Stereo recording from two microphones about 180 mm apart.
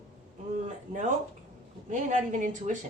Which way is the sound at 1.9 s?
45° right (ahead or behind).